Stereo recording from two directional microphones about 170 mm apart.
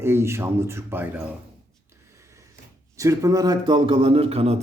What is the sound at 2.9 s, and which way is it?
A man's voice, 20° right (ahead or behind).